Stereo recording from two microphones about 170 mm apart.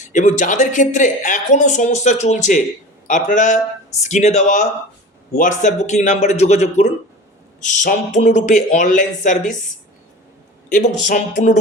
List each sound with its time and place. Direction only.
0.1 s speech: 45° left (ahead or behind)
10.7 s speech: 50° left (ahead or behind)